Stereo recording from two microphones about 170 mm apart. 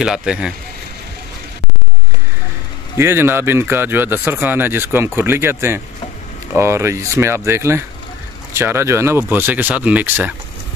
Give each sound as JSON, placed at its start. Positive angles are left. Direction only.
{"t": 0.0, "sound": "speech", "side_deg": -5}
{"t": 3.0, "sound": "speech", "side_deg": -15}